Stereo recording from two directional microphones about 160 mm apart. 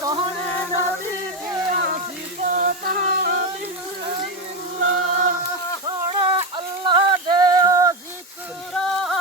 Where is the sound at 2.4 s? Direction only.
50° right (ahead or behind).